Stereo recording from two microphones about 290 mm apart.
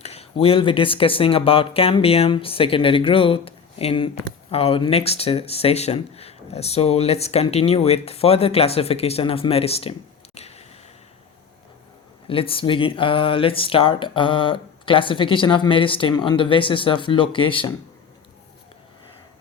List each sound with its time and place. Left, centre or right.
0.0 s speech: left
10.3 s a sound: left
12.3 s speech: centre